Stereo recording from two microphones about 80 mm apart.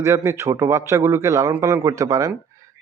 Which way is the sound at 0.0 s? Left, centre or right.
Right.